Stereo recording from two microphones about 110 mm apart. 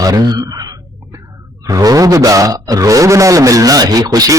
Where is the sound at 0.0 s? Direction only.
35° right (ahead or behind).